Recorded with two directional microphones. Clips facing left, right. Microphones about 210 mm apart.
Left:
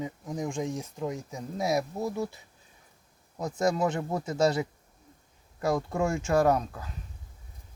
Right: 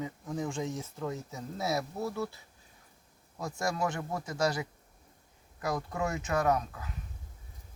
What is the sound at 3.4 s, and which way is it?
Speech, 20° left (ahead or behind).